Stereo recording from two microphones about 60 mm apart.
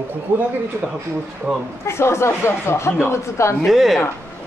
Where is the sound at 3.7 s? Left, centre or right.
Centre.